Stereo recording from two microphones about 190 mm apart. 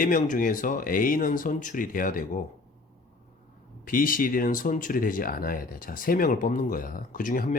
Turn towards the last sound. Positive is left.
turn(degrees=45)  # may be behind; listen again after turning